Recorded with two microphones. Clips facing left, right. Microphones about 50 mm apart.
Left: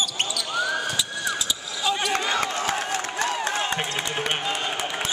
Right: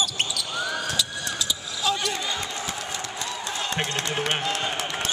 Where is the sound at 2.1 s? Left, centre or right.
Left.